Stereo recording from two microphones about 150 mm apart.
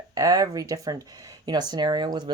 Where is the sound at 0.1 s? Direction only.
25° right (ahead or behind).